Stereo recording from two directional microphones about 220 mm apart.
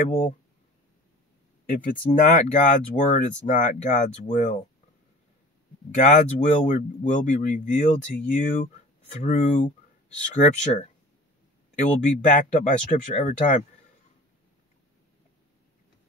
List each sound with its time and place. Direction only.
0.0 s speech: 25° left (ahead or behind)
1.7 s speech: 35° left (ahead or behind)
5.9 s speech: 35° left (ahead or behind)